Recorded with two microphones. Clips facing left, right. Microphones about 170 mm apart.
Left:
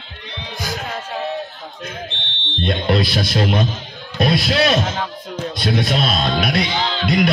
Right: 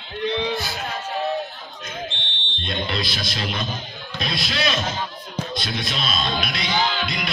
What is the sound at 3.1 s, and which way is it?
A man's voice, 50° left (ahead or behind).